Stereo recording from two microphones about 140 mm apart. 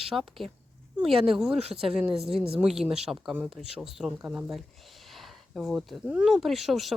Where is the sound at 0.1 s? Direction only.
Centre (ahead or behind).